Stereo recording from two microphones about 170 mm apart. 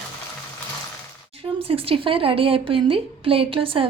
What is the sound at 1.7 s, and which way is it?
A woman's voice, 35° right (ahead or behind).